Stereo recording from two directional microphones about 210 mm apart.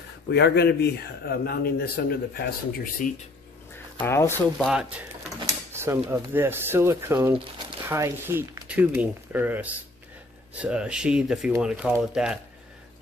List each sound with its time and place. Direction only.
0.3 s a man's voice: 50° left (ahead or behind)
4.0 s speech: 10° left (ahead or behind)
4.6 s speech: 5° right (ahead or behind)
5.7 s a sound: 10° right (ahead or behind)
6.0 s speech: 10° right (ahead or behind)